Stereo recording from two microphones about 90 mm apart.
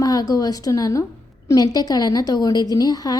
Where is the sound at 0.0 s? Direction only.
45° left (ahead or behind).